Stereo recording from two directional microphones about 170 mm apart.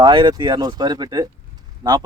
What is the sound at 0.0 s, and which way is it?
Speech, 25° right (ahead or behind).